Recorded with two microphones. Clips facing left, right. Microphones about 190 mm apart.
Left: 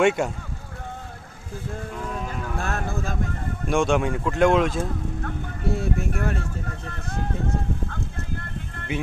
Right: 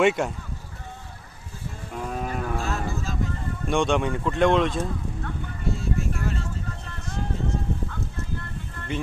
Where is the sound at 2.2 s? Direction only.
50° right (ahead or behind).